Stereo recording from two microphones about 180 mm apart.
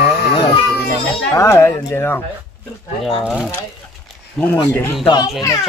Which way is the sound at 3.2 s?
5° right (ahead or behind).